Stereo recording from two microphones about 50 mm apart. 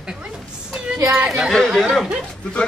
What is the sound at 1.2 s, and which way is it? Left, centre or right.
Speech, centre.